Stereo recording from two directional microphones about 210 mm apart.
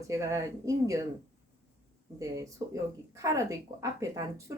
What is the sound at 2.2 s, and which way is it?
Speech, 15° right (ahead or behind).